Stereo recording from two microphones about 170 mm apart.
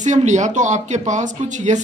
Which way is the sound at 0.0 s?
45° right (ahead or behind).